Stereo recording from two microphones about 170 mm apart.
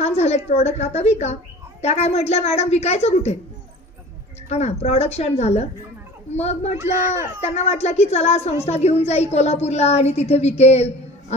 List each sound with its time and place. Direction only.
0.0 s a woman's voice: 40° left (ahead or behind)
4.5 s a woman's voice: 40° left (ahead or behind)